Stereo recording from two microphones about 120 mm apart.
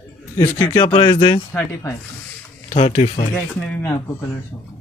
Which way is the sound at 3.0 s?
50° left (ahead or behind).